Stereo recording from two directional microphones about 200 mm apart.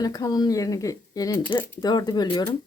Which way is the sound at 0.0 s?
20° left (ahead or behind).